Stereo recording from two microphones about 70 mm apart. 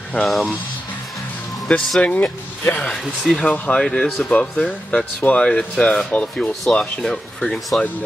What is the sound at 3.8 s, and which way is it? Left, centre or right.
Speech, centre.